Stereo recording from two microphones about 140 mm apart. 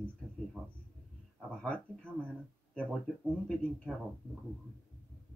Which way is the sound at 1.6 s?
10° left (ahead or behind).